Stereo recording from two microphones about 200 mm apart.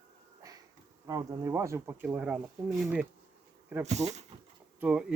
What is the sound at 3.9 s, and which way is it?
Speech, 35° right (ahead or behind).